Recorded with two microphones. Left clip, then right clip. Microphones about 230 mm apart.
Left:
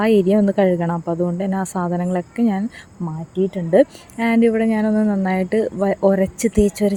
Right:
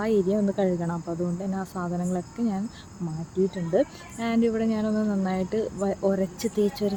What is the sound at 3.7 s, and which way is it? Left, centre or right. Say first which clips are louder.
Speech: left 12 dB; left.